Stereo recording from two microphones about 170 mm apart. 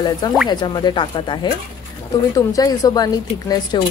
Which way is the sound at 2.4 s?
20° left (ahead or behind).